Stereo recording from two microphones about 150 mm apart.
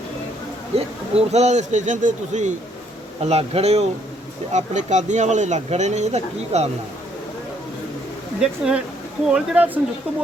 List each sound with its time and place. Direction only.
0.8 s speech: 45° right (ahead or behind)
3.2 s speech: 45° right (ahead or behind)
8.4 s speech: 5° right (ahead or behind)